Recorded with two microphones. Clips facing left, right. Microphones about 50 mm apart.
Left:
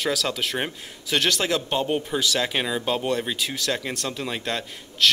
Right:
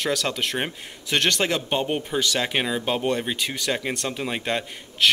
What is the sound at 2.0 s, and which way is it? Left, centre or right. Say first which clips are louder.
A man's voice: even; centre.